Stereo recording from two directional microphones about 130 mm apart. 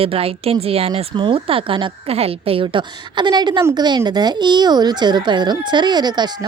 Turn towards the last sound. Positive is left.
turn(degrees=-35)  # may be behind; listen again after turning